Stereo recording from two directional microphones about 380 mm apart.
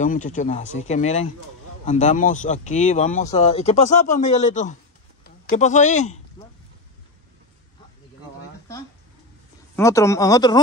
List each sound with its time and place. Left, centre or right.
0.0 s speech: centre
9.8 s speech: centre